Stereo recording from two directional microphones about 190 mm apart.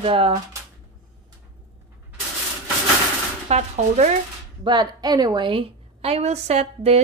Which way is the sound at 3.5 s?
35° right (ahead or behind).